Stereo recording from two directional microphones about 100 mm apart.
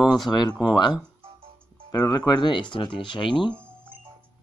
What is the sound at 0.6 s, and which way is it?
Speech, 45° left (ahead or behind).